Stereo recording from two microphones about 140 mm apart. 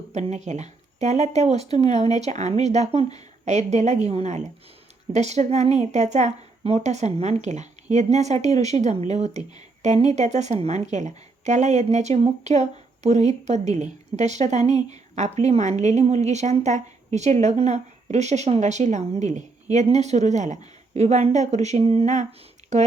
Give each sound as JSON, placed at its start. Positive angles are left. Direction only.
{"t": 0.1, "sound": "a woman's voice", "side_deg": -55}